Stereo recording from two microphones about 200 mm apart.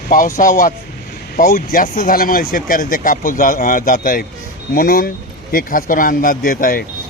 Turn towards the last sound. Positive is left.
turn(degrees=45)  # may be behind; listen again after turning